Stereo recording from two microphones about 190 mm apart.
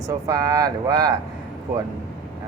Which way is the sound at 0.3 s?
20° right (ahead or behind).